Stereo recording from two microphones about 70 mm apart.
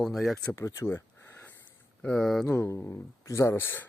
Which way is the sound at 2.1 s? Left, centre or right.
Centre.